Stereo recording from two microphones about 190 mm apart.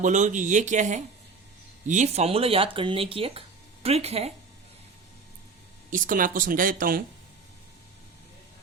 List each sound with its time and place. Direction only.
0.0 s speech: 40° right (ahead or behind)
5.9 s speech: 45° right (ahead or behind)